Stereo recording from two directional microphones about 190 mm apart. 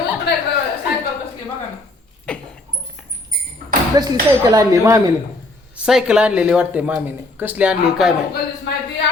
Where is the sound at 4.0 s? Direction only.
20° right (ahead or behind).